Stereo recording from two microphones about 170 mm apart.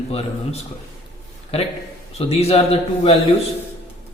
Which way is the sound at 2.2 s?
35° left (ahead or behind).